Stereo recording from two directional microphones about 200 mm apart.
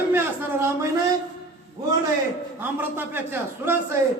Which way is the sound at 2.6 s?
10° right (ahead or behind).